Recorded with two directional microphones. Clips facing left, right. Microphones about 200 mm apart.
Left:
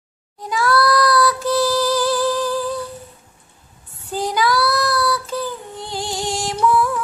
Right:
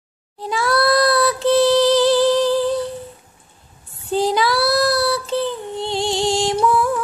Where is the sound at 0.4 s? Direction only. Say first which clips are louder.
Even; 25° right (ahead or behind).